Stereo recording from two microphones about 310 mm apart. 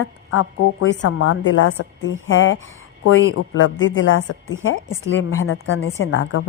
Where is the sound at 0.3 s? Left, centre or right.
Left.